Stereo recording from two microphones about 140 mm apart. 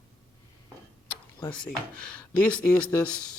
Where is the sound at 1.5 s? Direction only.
10° left (ahead or behind).